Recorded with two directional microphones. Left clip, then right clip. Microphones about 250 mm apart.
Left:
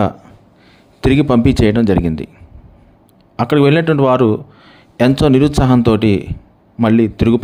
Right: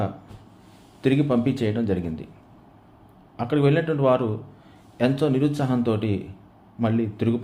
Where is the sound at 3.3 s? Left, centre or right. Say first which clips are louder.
Left 10 dB; left.